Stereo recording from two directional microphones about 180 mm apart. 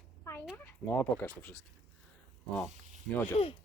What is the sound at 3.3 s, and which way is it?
Speech, 30° left (ahead or behind).